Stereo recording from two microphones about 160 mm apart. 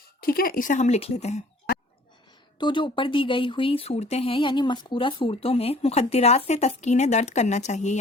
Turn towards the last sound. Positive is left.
turn(degrees=45)  # may be behind; listen again after turning